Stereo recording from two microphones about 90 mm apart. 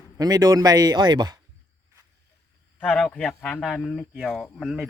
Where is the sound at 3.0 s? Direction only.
5° left (ahead or behind).